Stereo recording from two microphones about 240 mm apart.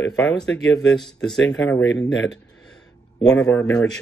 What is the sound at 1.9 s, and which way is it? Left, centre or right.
Speech, left.